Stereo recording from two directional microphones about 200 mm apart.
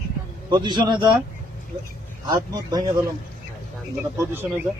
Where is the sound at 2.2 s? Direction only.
20° right (ahead or behind).